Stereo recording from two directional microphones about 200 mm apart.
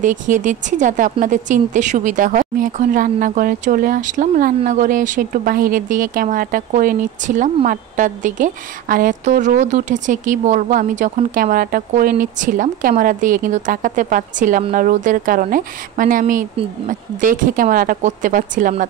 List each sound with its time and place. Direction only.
0.0 s a woman's voice: 40° right (ahead or behind)